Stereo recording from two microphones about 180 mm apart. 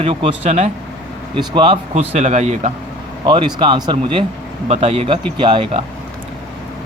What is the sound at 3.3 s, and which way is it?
Speech, 25° right (ahead or behind).